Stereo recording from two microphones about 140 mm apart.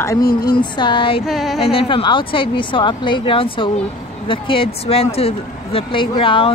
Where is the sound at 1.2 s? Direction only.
Centre (ahead or behind).